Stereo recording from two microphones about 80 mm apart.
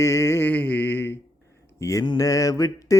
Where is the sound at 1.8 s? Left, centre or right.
Left.